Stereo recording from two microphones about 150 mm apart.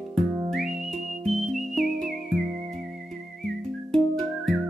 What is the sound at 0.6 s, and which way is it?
Music, centre (ahead or behind).